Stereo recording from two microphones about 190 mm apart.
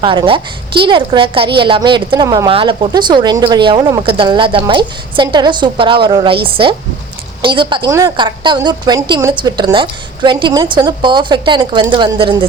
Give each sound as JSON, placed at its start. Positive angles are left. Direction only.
{"t": 0.0, "sound": "a woman's voice", "side_deg": -25}